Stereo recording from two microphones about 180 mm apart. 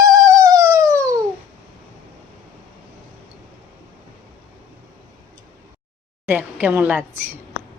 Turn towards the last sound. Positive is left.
turn(degrees=-10)  # may be behind; listen again after turning